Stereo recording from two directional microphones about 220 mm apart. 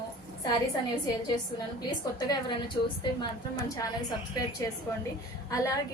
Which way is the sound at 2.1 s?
20° left (ahead or behind).